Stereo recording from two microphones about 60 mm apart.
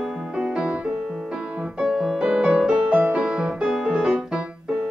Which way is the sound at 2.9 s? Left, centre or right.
Right.